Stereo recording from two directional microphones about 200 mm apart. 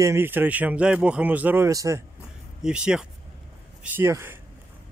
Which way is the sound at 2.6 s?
5° right (ahead or behind).